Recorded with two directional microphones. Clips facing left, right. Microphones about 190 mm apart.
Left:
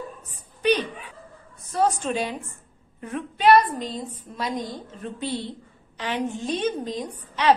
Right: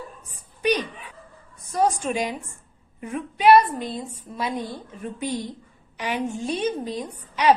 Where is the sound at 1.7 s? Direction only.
10° right (ahead or behind).